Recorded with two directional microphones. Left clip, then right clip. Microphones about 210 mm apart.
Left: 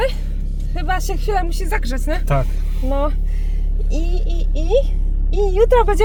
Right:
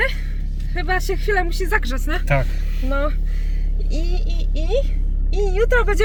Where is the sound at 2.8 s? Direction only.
5° right (ahead or behind).